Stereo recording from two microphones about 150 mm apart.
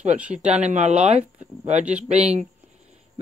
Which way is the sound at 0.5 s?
50° right (ahead or behind).